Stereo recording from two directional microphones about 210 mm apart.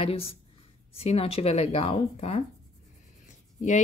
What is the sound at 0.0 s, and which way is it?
A woman's voice, 25° left (ahead or behind).